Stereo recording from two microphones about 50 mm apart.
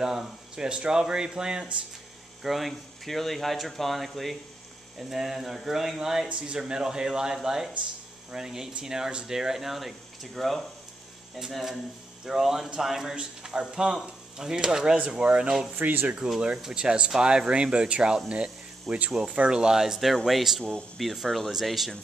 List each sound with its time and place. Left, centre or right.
0.0 s speech: centre
2.4 s speech: centre
15.7 s speech: right
16.6 s speech: centre